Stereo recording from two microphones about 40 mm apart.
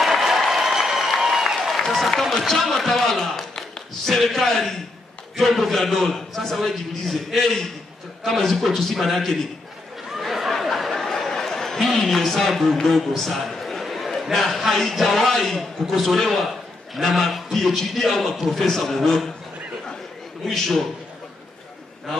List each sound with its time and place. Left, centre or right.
0.0 s applause: centre
2.0 s a man's voice: centre
10.1 s chatter: centre
12.1 s a man's voice: centre
20.4 s a man's voice: centre